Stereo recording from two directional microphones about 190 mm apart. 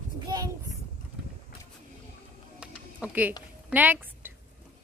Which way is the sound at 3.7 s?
10° right (ahead or behind).